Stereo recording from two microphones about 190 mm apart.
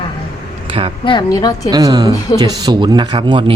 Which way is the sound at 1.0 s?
25° left (ahead or behind).